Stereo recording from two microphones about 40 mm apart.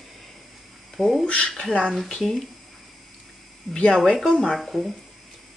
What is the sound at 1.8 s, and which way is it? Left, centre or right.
Speech, centre.